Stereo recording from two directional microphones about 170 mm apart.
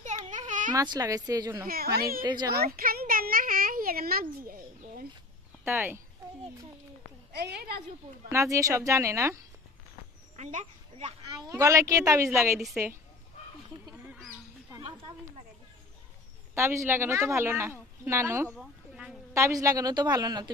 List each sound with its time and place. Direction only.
0.0 s a sound: 45° right (ahead or behind)
0.7 s a woman's voice: 25° right (ahead or behind)
1.7 s speech: 65° right (ahead or behind)
2.5 s a sound: 65° right (ahead or behind)
5.7 s speech: 15° right (ahead or behind)
7.3 s a woman's voice: 75° right (ahead or behind)
8.3 s speech: 15° right (ahead or behind)
10.3 s speech: 45° right (ahead or behind)
11.2 s a woman's voice: 20° right (ahead or behind)
14.7 s a sound: 20° right (ahead or behind)
16.5 s speech: 15° right (ahead or behind)
18.6 s a sound: centre (ahead or behind)
19.3 s a woman's voice: 20° right (ahead or behind)